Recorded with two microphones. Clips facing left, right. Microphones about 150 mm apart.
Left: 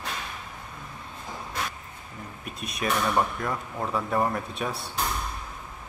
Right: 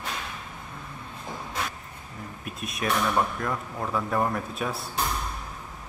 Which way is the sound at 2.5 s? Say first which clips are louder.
Even; centre (ahead or behind).